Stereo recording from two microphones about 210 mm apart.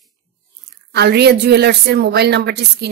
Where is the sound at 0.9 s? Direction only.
50° right (ahead or behind).